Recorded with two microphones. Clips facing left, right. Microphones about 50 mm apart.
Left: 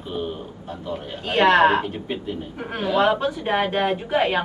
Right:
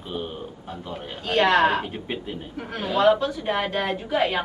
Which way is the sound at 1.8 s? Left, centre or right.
Centre.